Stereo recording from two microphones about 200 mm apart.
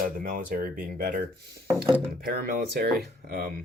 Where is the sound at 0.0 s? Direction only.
45° right (ahead or behind).